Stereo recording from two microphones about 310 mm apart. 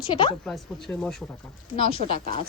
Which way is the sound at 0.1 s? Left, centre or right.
Centre.